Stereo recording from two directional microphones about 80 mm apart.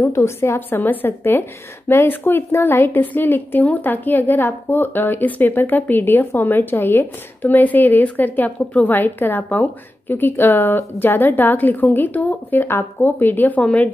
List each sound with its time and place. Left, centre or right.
0.1 s a woman's voice: left; by 13.9 s centre